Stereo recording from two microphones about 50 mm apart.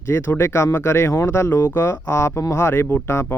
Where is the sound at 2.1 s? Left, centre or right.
Left.